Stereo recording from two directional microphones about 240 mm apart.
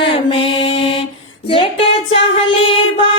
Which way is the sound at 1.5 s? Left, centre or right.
Left.